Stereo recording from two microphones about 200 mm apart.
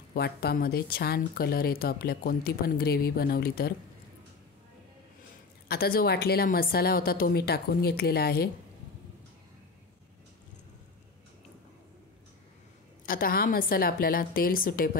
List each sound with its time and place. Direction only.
0.1 s speech: 50° left (ahead or behind)
5.7 s speech: 50° left (ahead or behind)
13.0 s speech: 45° left (ahead or behind)